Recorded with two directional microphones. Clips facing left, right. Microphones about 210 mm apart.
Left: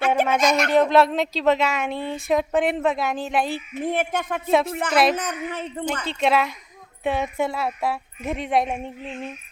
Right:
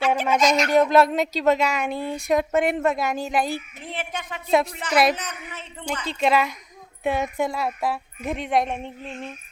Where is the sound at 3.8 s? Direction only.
50° left (ahead or behind).